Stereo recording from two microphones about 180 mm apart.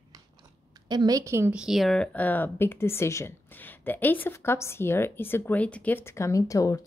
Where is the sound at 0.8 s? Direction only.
20° right (ahead or behind).